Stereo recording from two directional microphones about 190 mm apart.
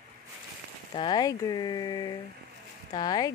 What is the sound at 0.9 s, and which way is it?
Speech, 20° left (ahead or behind).